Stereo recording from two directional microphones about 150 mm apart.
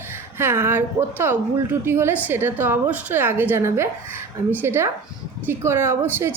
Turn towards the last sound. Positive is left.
turn(degrees=-15)  # may be behind; listen again after turning